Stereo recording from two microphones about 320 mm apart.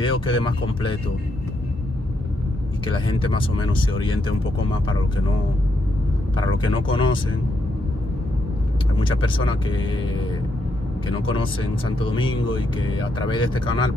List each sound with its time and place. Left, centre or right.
0.0 s speech: centre
2.8 s speech: centre
6.3 s speech: centre
8.9 s speech: centre